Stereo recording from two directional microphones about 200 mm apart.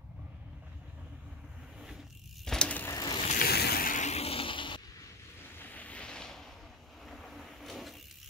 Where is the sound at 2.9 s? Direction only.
20° left (ahead or behind).